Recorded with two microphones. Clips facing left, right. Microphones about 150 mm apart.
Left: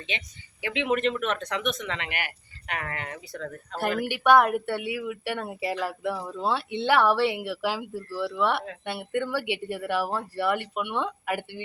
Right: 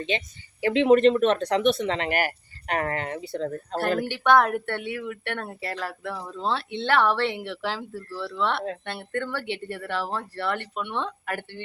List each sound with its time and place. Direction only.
0.1 s speech: 35° right (ahead or behind)
4.0 s speech: 10° left (ahead or behind)